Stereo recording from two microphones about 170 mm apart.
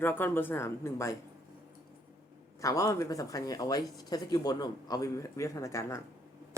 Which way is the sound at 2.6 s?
20° left (ahead or behind).